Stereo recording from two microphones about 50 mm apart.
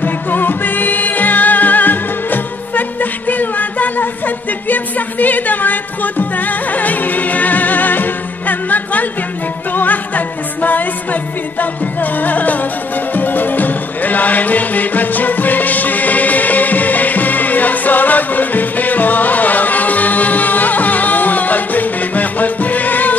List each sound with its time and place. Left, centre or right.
0.0 s music: left